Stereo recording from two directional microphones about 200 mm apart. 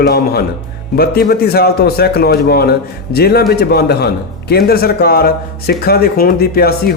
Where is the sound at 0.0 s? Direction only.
50° left (ahead or behind).